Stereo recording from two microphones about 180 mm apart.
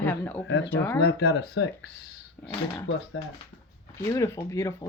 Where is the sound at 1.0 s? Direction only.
65° left (ahead or behind).